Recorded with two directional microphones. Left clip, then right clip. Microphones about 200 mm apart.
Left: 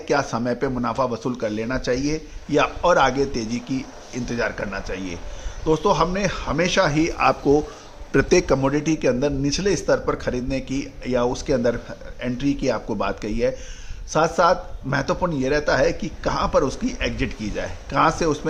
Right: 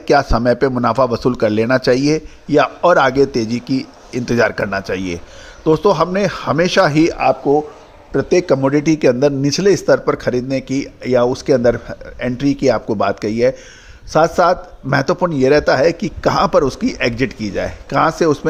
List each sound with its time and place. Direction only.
0.1 s a man's voice: 30° right (ahead or behind)
7.5 s speech: 10° left (ahead or behind)
8.4 s a man's voice: 20° right (ahead or behind)